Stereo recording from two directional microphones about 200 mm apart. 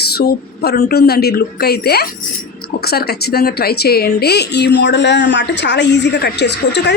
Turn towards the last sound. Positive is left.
turn(degrees=60)  # may be behind; listen again after turning